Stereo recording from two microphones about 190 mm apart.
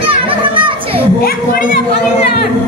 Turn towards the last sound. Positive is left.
turn(degrees=-25)  # may be behind; listen again after turning